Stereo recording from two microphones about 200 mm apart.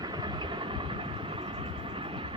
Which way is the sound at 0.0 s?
20° right (ahead or behind).